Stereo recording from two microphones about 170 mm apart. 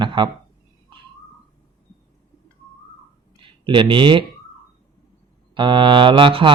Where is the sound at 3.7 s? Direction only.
30° right (ahead or behind).